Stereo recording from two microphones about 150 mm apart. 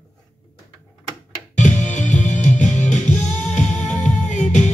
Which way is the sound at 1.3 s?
55° left (ahead or behind).